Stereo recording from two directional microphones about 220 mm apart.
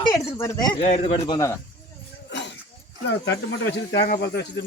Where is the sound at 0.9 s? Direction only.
30° left (ahead or behind).